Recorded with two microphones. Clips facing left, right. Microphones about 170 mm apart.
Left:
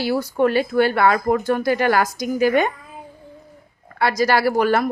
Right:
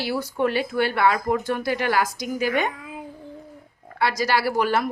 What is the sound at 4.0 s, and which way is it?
Speech, 45° left (ahead or behind).